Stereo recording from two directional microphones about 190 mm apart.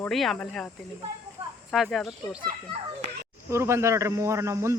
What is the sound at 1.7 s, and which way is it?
Speech, centre (ahead or behind).